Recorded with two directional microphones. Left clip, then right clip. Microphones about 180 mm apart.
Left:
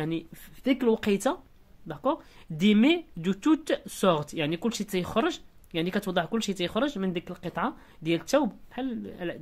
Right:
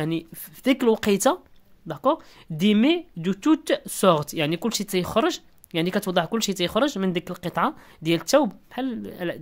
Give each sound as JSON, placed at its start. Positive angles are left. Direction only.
{"t": 0.0, "sound": "speech", "side_deg": -30}
{"t": 2.5, "sound": "speech", "side_deg": -20}